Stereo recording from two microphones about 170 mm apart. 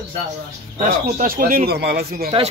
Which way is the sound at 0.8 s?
50° right (ahead or behind).